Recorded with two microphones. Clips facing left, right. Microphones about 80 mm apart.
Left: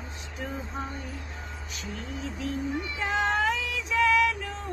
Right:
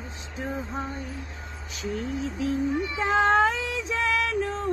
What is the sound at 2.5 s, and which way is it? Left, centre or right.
Child singing, right.